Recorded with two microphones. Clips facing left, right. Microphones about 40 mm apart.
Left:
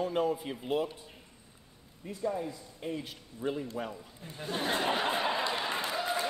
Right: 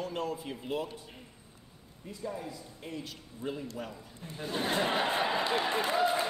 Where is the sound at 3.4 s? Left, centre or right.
Centre.